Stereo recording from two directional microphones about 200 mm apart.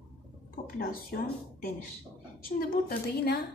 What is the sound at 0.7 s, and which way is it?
Speech, 50° left (ahead or behind).